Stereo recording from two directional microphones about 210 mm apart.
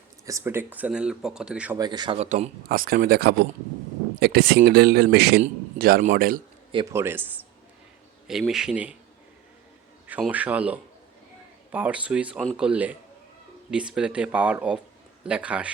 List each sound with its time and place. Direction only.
0.3 s speech: 15° right (ahead or behind)
1.8 s speech: 20° right (ahead or behind)
2.6 s speech: 45° right (ahead or behind)
5.4 s a man's voice: 40° right (ahead or behind)
6.9 s speech: 10° right (ahead or behind)
10.1 s speech: 5° right (ahead or behind)